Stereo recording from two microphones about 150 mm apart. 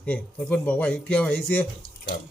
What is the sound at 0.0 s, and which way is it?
A man's voice, 10° left (ahead or behind).